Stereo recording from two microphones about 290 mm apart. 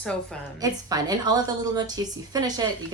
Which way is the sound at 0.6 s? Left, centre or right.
Centre.